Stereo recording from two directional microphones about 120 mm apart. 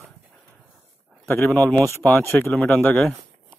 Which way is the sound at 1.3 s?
15° left (ahead or behind).